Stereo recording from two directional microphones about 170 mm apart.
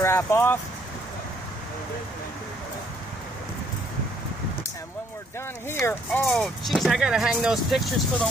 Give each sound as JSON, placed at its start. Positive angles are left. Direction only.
{"t": 0.0, "sound": "speech", "side_deg": 15}
{"t": 5.7, "sound": "speech", "side_deg": 15}
{"t": 6.2, "sound": "speech", "side_deg": 0}